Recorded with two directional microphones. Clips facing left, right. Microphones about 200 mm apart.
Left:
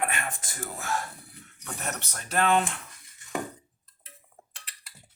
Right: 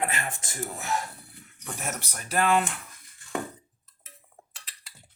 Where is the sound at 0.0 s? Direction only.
30° right (ahead or behind).